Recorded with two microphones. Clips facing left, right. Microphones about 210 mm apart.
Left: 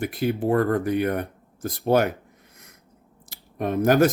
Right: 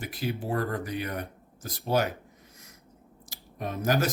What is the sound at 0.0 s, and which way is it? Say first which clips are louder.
Speech: left 9 dB; 55° left (ahead or behind).